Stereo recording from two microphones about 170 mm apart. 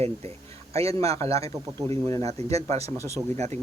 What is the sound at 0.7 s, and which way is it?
A man's voice, 35° right (ahead or behind).